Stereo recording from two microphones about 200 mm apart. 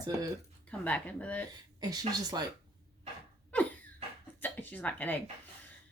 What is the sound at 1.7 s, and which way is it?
Speech, 20° right (ahead or behind).